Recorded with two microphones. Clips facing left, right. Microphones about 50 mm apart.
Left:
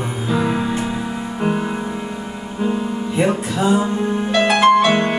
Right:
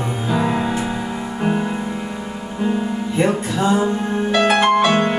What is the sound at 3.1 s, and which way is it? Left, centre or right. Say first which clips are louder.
Music: even; centre.